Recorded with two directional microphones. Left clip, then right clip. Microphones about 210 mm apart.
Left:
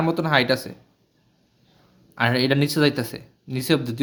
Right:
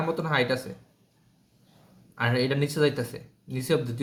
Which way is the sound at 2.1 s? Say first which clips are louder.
Left 6 dB; 45° left (ahead or behind).